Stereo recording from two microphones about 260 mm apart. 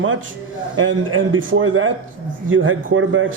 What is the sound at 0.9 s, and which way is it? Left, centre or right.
A man's voice, right.